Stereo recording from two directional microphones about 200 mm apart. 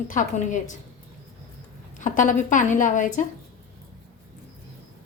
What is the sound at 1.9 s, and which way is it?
A woman's voice, 40° left (ahead or behind).